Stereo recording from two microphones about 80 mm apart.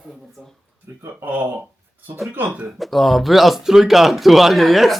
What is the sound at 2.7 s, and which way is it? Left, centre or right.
Speech, centre.